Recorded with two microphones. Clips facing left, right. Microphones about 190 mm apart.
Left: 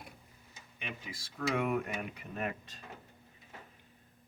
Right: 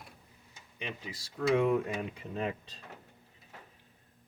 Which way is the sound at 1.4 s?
25° right (ahead or behind).